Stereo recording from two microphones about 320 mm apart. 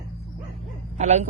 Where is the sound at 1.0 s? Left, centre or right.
Right.